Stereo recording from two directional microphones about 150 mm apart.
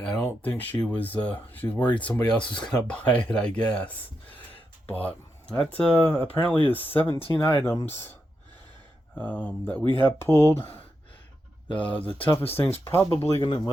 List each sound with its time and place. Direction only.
0.2 s speech: 15° left (ahead or behind)
4.9 s speech: 10° left (ahead or behind)
9.1 s speech: 10° left (ahead or behind)